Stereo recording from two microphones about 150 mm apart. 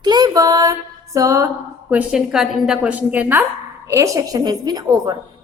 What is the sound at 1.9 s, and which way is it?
A woman's voice, 10° right (ahead or behind).